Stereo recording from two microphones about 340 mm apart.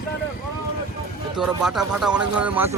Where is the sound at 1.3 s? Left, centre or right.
Centre.